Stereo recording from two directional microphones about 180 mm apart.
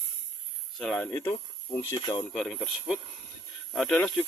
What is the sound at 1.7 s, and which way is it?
Speech, 20° left (ahead or behind).